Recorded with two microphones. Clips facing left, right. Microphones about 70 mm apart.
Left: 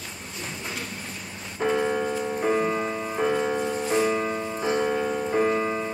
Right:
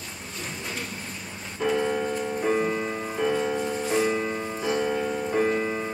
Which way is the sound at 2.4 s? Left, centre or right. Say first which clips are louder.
Left 1 dB; centre.